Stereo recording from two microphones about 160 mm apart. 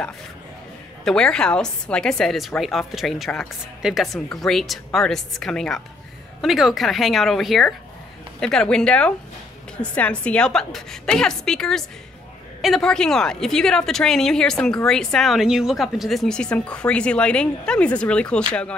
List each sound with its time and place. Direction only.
1.0 s a woman's voice: 5° left (ahead or behind)